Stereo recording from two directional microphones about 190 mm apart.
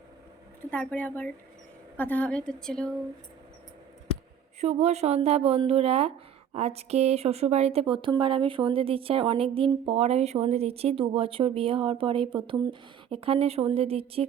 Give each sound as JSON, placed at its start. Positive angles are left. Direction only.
{"t": 0.6, "sound": "a woman's voice", "side_deg": 10}
{"t": 4.6, "sound": "speech", "side_deg": -35}